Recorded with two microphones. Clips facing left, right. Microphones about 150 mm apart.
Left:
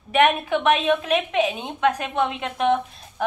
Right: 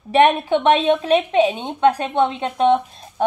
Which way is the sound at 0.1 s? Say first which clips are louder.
Right 4 dB; 30° right (ahead or behind).